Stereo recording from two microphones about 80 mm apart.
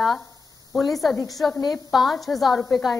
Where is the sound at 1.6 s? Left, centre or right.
Left.